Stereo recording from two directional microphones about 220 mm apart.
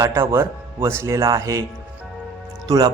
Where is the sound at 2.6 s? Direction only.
15° right (ahead or behind).